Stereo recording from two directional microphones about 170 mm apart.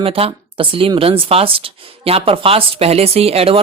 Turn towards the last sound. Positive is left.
turn(degrees=-35)  # may be behind; listen again after turning